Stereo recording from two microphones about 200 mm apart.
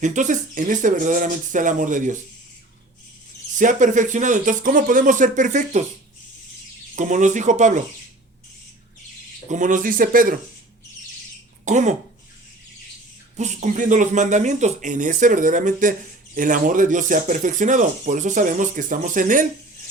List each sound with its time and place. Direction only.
0.0 s speech: 40° right (ahead or behind)
3.6 s speech: 40° right (ahead or behind)
6.9 s speech: 40° right (ahead or behind)
9.5 s speech: 40° right (ahead or behind)
11.6 s speech: 35° right (ahead or behind)
13.3 s speech: 35° right (ahead or behind)